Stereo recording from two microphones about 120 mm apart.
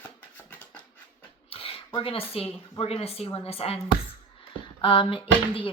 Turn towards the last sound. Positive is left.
turn(degrees=45)  # may be behind; listen again after turning